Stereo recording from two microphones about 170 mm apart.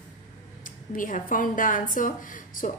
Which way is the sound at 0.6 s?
50° left (ahead or behind).